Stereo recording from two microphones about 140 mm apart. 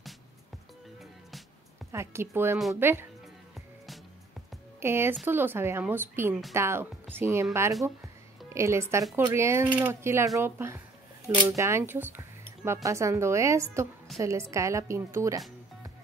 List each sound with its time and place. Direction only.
1.9 s speech: 20° right (ahead or behind)
4.7 s speech: 15° right (ahead or behind)
8.5 s speech: 20° right (ahead or behind)